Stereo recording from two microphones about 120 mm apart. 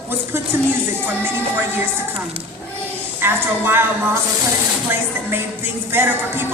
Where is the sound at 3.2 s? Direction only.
20° right (ahead or behind).